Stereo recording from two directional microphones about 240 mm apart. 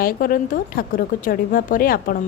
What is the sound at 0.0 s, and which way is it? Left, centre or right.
A woman's voice, left.